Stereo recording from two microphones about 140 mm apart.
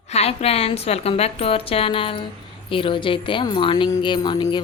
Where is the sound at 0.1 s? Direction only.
50° left (ahead or behind).